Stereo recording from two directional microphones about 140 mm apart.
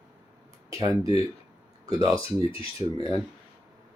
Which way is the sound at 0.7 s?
25° right (ahead or behind).